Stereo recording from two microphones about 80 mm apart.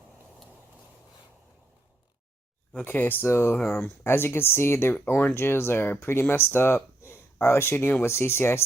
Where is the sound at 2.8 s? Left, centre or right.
Left.